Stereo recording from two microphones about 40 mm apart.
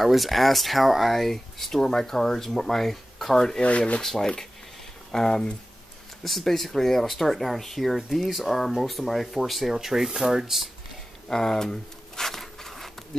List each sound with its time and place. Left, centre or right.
0.0 s speech: centre
3.3 s speech: centre
3.6 s speech: left
4.0 s speech: centre
6.2 s speech: centre
11.2 s zipper: centre